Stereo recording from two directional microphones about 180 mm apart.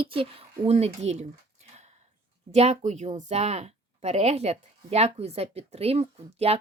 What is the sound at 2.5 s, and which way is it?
A woman's voice, 35° right (ahead or behind).